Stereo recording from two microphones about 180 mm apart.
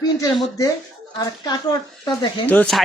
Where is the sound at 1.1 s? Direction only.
20° left (ahead or behind).